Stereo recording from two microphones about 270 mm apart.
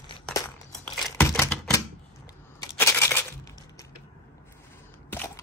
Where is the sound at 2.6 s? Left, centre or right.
Centre.